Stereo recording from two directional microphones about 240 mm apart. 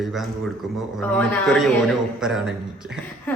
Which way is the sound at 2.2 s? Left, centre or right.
Centre.